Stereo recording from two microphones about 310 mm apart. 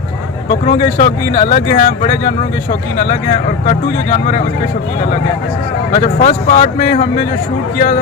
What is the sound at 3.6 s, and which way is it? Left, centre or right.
Speech, left.